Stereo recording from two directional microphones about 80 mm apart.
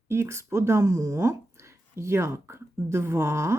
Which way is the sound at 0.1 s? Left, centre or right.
Right.